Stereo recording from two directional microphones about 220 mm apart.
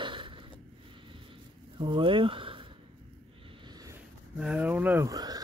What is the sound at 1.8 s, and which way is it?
Speech, 20° right (ahead or behind).